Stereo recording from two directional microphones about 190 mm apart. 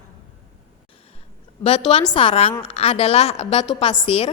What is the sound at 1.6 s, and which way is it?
A woman's voice, 30° left (ahead or behind).